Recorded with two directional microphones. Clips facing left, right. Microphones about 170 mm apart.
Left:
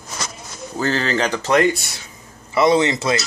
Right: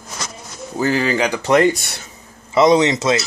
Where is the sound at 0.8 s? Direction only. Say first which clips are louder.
Right 3 dB; 15° right (ahead or behind).